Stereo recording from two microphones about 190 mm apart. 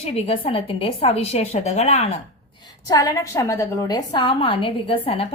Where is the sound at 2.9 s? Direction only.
15° left (ahead or behind).